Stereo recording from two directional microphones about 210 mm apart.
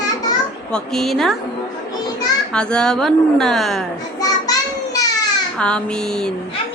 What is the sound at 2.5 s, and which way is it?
A woman's voice, 5° left (ahead or behind).